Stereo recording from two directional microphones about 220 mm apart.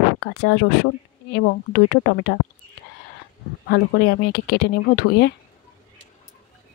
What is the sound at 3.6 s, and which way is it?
Speech, 50° left (ahead or behind).